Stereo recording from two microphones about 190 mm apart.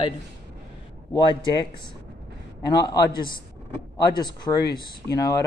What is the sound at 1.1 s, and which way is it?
Speech, 25° left (ahead or behind).